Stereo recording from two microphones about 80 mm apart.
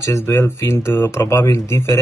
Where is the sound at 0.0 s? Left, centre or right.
Left.